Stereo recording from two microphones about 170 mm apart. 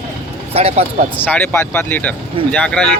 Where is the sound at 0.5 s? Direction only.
35° right (ahead or behind).